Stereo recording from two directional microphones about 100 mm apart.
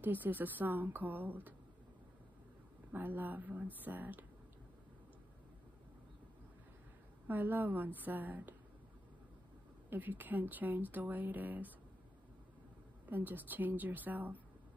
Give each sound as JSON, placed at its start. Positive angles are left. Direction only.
{"t": 0.0, "sound": "a woman's voice", "side_deg": -20}
{"t": 2.9, "sound": "speech", "side_deg": -20}
{"t": 7.2, "sound": "a woman's voice", "side_deg": -20}
{"t": 9.8, "sound": "speech", "side_deg": -20}
{"t": 13.0, "sound": "speech", "side_deg": -20}